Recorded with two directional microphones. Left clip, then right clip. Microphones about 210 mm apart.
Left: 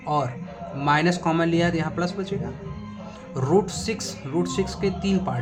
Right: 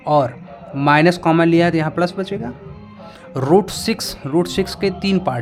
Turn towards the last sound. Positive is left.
turn(degrees=-45)  # may be behind; listen again after turning